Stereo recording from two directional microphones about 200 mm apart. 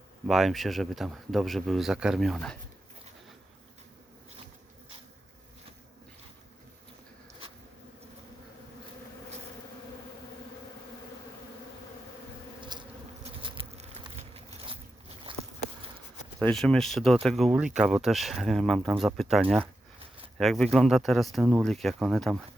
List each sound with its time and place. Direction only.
0.3 s speech: centre (ahead or behind)
12.7 s bee: 20° right (ahead or behind)
13.4 s insect: 30° right (ahead or behind)
15.3 s a sound: 25° right (ahead or behind)
16.4 s speech: 5° left (ahead or behind)